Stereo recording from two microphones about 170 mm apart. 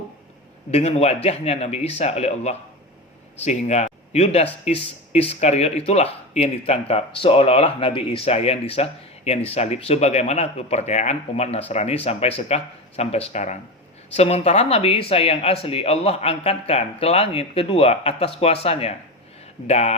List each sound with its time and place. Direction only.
0.7 s speech: 40° left (ahead or behind)